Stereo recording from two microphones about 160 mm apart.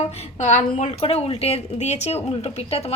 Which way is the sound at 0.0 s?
40° left (ahead or behind).